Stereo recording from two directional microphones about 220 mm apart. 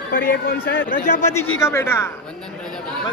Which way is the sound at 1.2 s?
10° left (ahead or behind).